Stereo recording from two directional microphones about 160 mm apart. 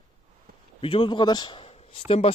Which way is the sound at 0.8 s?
35° left (ahead or behind).